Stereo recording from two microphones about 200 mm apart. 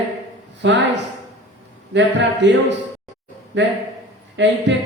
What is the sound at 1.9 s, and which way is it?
Speech, 65° right (ahead or behind).